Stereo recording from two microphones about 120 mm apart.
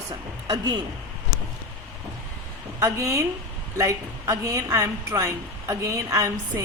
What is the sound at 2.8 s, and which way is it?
A woman's voice, 25° right (ahead or behind).